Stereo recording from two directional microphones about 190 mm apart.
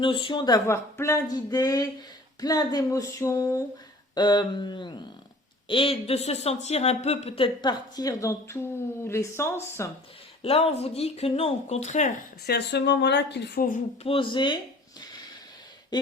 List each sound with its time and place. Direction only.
0.0 s speech: 25° left (ahead or behind)
10.4 s speech: 30° left (ahead or behind)
12.5 s speech: 60° left (ahead or behind)
13.7 s speech: 35° left (ahead or behind)
15.9 s a sound: 20° left (ahead or behind)